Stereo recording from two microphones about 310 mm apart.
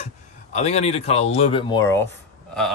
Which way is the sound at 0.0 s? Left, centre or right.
Left.